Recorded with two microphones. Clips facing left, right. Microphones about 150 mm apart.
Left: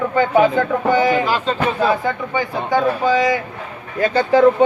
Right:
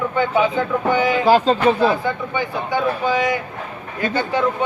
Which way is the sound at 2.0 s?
40° left (ahead or behind).